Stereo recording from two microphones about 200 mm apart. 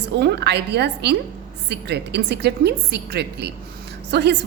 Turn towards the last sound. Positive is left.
turn(degrees=-60)  # may be behind; listen again after turning